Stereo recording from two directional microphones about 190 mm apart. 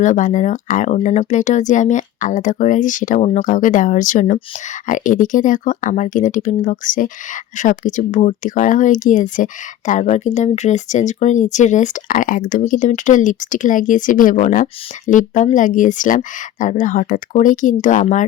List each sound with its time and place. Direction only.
0.0 s speech: 40° left (ahead or behind)